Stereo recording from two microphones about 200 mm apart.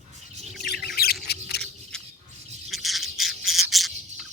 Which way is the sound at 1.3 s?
55° left (ahead or behind).